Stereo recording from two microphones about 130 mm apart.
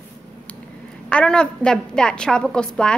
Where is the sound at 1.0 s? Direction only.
5° left (ahead or behind).